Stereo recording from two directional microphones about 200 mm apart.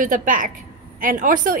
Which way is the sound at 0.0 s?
40° right (ahead or behind).